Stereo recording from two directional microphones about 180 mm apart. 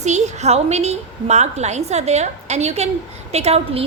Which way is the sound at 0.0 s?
40° right (ahead or behind).